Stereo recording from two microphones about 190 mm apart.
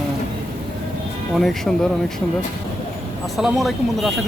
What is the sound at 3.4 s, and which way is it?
Speech, centre (ahead or behind).